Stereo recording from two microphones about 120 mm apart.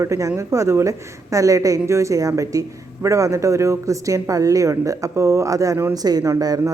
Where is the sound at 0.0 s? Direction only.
25° right (ahead or behind).